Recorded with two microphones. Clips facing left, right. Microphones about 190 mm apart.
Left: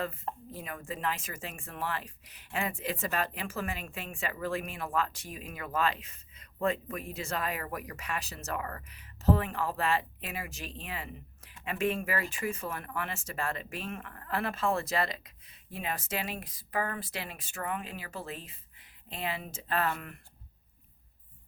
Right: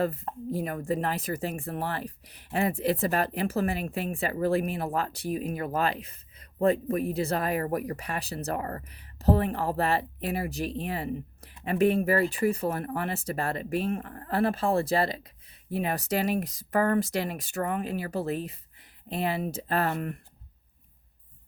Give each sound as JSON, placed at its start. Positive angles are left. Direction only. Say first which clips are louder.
{"t": 0.5, "sound": "speech", "louder": "right 11 dB", "side_deg": -40}